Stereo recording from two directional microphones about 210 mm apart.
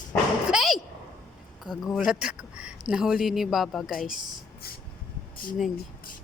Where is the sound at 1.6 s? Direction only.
Centre (ahead or behind).